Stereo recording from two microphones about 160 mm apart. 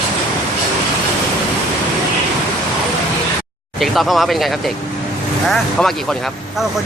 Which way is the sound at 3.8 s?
Centre (ahead or behind).